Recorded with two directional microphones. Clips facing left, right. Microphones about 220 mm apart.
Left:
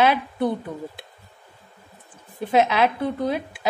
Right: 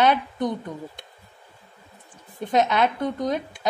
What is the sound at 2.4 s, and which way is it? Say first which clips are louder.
A woman's voice: left 2 dB; 5° left (ahead or behind).